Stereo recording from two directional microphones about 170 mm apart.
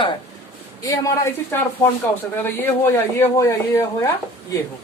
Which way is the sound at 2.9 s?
15° left (ahead or behind).